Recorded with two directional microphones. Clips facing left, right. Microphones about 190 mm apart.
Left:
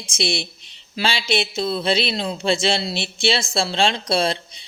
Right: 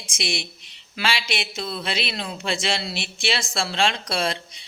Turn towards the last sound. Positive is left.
turn(degrees=30)  # may be behind; listen again after turning